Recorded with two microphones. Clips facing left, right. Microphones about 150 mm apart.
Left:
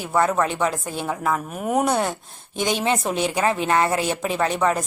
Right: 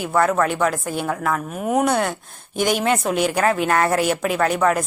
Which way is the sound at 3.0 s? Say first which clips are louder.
Right 3 dB; 5° right (ahead or behind).